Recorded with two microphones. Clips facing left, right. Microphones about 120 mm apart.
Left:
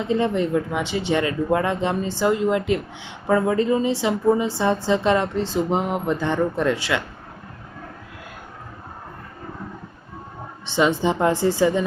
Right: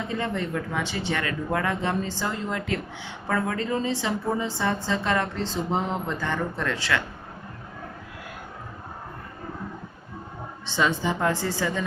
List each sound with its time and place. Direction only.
0.0 s speech: 20° left (ahead or behind)
10.7 s speech: 20° left (ahead or behind)